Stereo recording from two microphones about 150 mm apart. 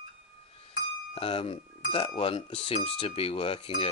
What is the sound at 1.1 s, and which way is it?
Speech, 40° left (ahead or behind).